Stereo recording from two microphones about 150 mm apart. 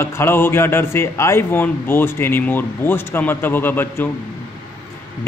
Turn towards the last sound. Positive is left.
turn(degrees=15)  # may be behind; listen again after turning